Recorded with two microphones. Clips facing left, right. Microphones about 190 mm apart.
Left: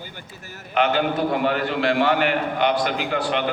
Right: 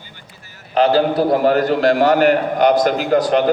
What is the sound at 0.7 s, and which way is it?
A man's voice, 35° right (ahead or behind).